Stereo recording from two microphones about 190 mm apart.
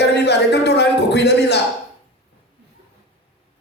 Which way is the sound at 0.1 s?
60° left (ahead or behind).